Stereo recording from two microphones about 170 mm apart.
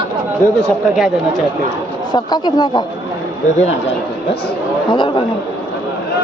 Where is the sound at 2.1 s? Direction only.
25° left (ahead or behind).